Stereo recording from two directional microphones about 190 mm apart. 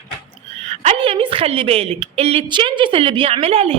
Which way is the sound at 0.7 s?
35° right (ahead or behind).